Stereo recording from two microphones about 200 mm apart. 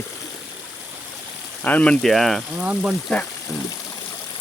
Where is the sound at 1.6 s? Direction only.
5° left (ahead or behind).